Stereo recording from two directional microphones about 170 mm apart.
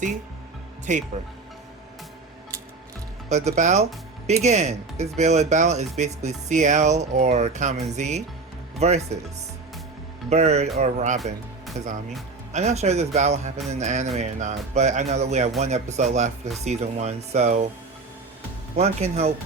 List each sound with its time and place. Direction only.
0.9 s speech: 45° right (ahead or behind)
3.2 s speech: 40° right (ahead or behind)
10.2 s speech: 40° right (ahead or behind)
12.5 s speech: 40° right (ahead or behind)
18.8 s speech: 40° right (ahead or behind)